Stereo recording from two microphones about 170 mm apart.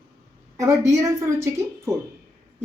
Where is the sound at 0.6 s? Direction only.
20° right (ahead or behind).